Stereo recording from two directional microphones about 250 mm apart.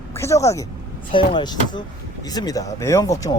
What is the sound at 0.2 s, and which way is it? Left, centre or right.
Speech, centre.